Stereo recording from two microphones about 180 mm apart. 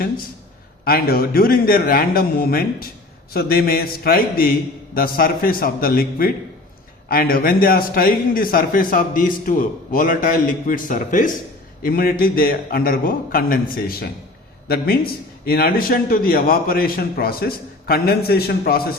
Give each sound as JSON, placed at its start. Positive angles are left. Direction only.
{"t": 0.9, "sound": "a man's voice", "side_deg": 55}